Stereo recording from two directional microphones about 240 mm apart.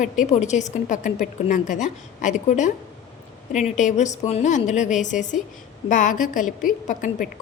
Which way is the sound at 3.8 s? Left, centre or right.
Left.